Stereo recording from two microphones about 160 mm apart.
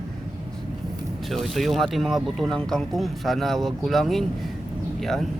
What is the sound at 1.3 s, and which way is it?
A man's voice, centre (ahead or behind).